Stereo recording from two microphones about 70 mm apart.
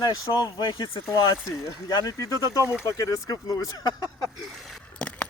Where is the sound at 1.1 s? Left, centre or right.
Left.